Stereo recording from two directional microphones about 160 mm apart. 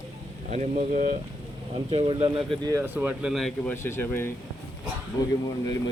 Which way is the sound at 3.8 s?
15° left (ahead or behind).